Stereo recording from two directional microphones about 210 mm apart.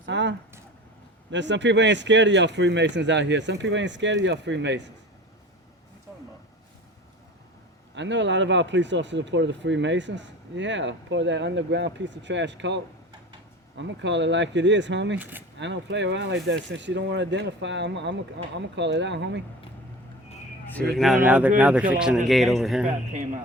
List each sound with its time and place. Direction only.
0.0 s a sound: 60° right (ahead or behind)
1.3 s speech: 60° right (ahead or behind)
7.9 s speech: 60° right (ahead or behind)
15.2 s speech: 10° right (ahead or behind)
15.5 s speech: 60° right (ahead or behind)
20.9 s speech: centre (ahead or behind)